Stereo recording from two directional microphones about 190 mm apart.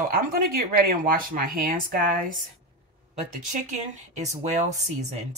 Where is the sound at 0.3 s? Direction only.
50° right (ahead or behind).